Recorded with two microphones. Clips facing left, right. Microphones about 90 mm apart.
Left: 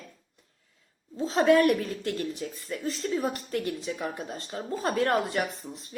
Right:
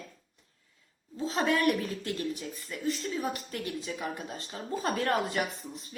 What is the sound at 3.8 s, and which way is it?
Speech, 20° left (ahead or behind).